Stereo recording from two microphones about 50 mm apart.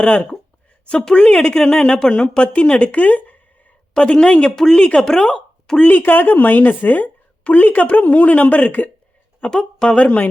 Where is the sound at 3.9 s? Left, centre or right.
Centre.